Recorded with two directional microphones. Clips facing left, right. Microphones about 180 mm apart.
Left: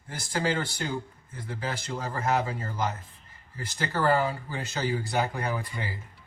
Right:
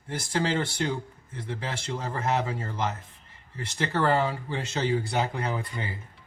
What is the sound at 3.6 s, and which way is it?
Speech, 25° right (ahead or behind).